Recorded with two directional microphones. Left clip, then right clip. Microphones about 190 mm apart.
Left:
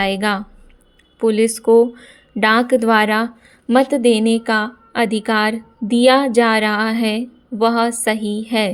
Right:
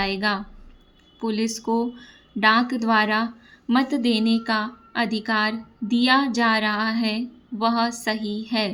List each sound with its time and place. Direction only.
0.0 s a woman's voice: 40° left (ahead or behind)